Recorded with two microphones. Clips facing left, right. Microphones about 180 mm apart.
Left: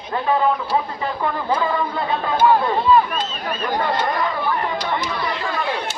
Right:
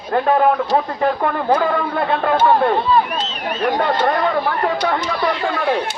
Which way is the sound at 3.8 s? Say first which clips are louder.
Right 4 dB; 70° right (ahead or behind).